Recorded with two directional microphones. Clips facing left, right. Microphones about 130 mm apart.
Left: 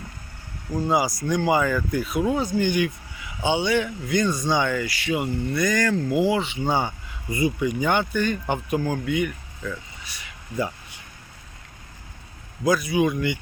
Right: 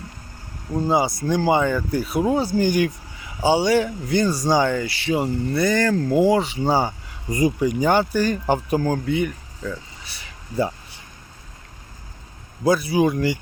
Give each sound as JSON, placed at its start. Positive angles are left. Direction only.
{"t": 0.7, "sound": "speech", "side_deg": -30}
{"t": 12.6, "sound": "speech", "side_deg": -30}